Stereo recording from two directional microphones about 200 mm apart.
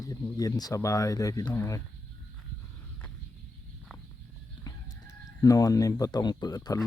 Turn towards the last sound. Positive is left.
turn(degrees=20)  # may be behind; listen again after turning